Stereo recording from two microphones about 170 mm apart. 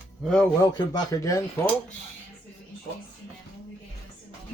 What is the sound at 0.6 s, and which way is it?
Speech, 20° left (ahead or behind).